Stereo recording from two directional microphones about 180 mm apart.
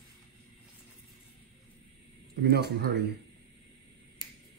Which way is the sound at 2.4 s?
60° right (ahead or behind).